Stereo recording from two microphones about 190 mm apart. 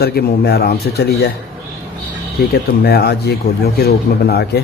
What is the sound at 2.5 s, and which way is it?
Speech, 55° left (ahead or behind).